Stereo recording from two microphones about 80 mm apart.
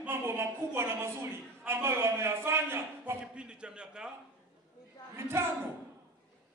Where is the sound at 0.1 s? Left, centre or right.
Right.